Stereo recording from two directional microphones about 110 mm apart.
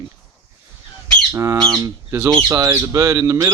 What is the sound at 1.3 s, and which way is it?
Speech, 30° right (ahead or behind).